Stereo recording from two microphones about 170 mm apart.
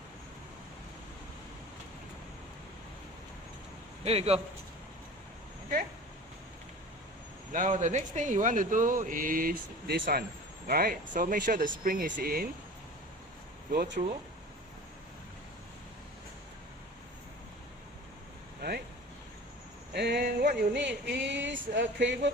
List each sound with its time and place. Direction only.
4.0 s a man's voice: 35° right (ahead or behind)
7.5 s speech: 50° right (ahead or behind)
13.7 s speech: 75° right (ahead or behind)
19.9 s a sound: 75° right (ahead or behind); by 22.3 s 90° right